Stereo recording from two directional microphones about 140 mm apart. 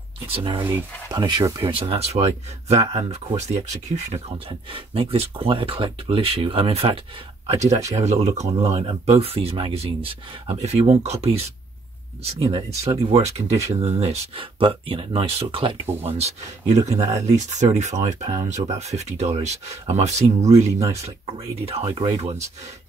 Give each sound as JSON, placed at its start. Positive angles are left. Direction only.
{"t": 0.3, "sound": "speech", "side_deg": -40}
{"t": 1.7, "sound": "speech", "side_deg": -45}
{"t": 4.5, "sound": "speech", "side_deg": -40}